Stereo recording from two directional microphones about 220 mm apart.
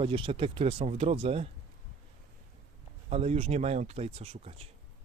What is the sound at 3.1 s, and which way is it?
Speech, 30° right (ahead or behind).